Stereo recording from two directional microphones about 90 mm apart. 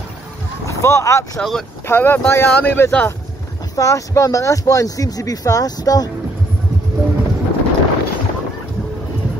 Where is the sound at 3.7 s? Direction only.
35° left (ahead or behind).